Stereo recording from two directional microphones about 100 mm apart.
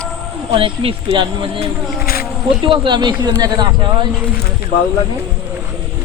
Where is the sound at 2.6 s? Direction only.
55° right (ahead or behind).